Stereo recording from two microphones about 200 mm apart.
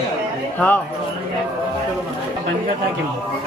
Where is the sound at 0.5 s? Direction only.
10° left (ahead or behind).